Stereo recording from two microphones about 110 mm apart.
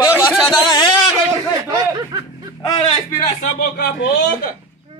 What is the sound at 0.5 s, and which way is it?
Speech, 45° left (ahead or behind).